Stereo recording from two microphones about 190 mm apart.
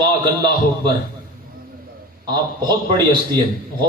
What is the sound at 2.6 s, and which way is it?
Speech, 20° right (ahead or behind).